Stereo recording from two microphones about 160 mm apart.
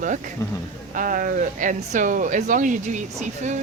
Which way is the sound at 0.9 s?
60° right (ahead or behind).